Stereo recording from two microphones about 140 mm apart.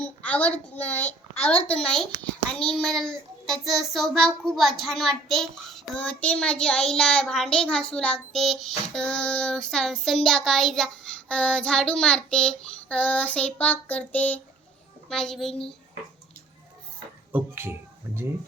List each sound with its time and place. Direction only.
0.0 s a woman's voice: 10° left (ahead or behind)
2.5 s child singing: 5° left (ahead or behind)
17.3 s speech: 15° right (ahead or behind)